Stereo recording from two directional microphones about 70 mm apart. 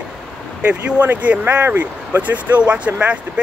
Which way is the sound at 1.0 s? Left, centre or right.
Right.